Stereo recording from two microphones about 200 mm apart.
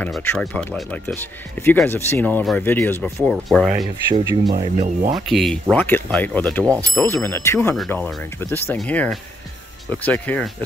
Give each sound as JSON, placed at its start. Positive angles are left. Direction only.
{"t": 0.0, "sound": "speech", "side_deg": 10}
{"t": 4.1, "sound": "speech", "side_deg": -15}
{"t": 4.7, "sound": "speech", "side_deg": -35}
{"t": 5.3, "sound": "speech", "side_deg": 0}
{"t": 6.6, "sound": "speech", "side_deg": -15}
{"t": 7.0, "sound": "speech", "side_deg": 10}